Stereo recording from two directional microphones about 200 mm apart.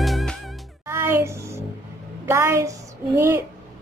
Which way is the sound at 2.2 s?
15° right (ahead or behind).